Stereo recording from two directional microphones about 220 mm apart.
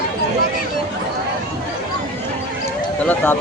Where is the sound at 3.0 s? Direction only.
10° left (ahead or behind).